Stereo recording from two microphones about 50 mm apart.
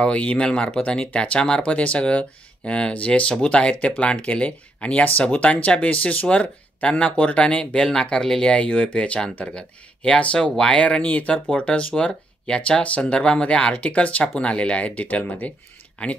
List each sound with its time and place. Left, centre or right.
0.0 s speech: left
8.5 s speech: left